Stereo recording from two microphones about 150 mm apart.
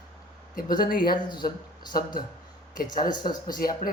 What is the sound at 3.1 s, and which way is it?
Speech, 30° left (ahead or behind).